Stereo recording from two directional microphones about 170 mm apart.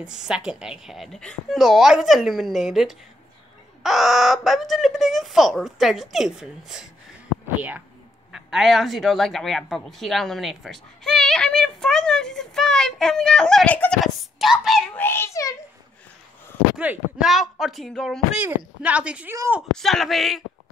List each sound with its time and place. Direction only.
0.0 s speech: 5° right (ahead or behind)
8.3 s speech: 5° right (ahead or behind)
15.0 s a child's voice: 15° left (ahead or behind)
16.7 s a woman's voice: 5° right (ahead or behind)
19.7 s speech: centre (ahead or behind)